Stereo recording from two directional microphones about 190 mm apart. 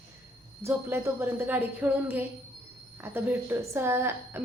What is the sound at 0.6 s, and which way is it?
A woman's voice, 15° right (ahead or behind).